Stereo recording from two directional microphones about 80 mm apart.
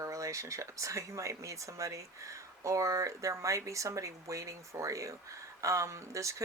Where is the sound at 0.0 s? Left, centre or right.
Right.